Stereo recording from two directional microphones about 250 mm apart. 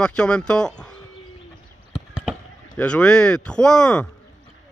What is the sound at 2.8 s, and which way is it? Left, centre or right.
Speech, centre.